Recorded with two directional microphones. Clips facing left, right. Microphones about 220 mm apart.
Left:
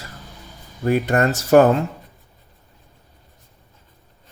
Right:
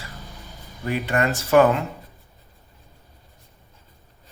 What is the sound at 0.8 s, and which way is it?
Speech, 45° left (ahead or behind).